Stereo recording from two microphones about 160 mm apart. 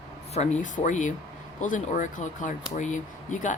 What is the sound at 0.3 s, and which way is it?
Speech, 45° left (ahead or behind).